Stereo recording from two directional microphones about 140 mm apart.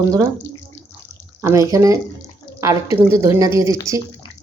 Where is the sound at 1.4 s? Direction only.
20° right (ahead or behind).